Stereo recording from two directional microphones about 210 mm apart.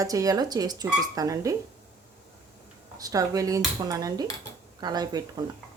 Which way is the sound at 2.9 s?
15° right (ahead or behind).